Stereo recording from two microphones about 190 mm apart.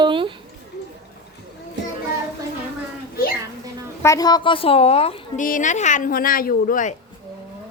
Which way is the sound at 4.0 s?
15° left (ahead or behind).